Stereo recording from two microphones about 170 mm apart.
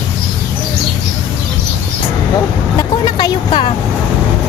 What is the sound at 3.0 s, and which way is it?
Speech, 25° left (ahead or behind).